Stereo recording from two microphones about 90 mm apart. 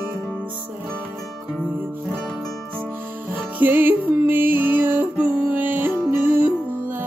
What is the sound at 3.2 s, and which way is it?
Music, 20° right (ahead or behind).